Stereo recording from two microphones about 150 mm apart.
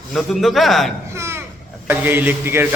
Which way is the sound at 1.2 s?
20° right (ahead or behind).